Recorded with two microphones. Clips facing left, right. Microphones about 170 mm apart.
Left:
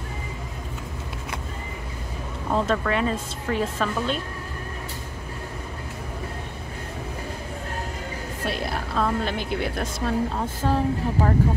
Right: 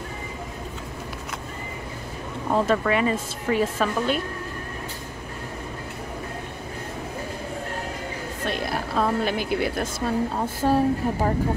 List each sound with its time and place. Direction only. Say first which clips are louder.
2.5 s a woman's voice: right 2 dB; 5° right (ahead or behind)
8.5 s a sound: even; centre (ahead or behind)
8.9 s a woman's voice: right 2 dB; 10° right (ahead or behind)